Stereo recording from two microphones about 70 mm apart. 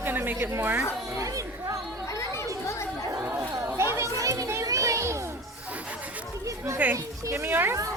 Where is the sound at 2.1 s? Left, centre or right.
Left.